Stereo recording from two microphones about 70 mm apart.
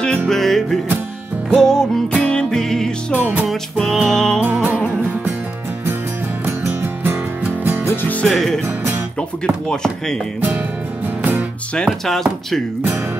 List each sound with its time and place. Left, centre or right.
0.3 s speech: centre
1.5 s music: centre
3.2 s music: right
3.9 s speech: centre
4.4 s music: right
7.6 s music: right
7.9 s music: left
8.3 s speech: centre
11.7 s speech: centre